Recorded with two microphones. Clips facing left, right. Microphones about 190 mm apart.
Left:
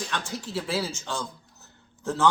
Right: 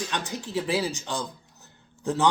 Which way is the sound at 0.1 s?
15° right (ahead or behind).